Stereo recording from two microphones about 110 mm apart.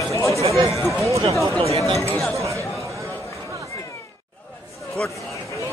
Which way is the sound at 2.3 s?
30° right (ahead or behind).